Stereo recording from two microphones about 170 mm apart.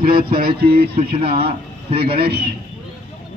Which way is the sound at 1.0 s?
35° right (ahead or behind).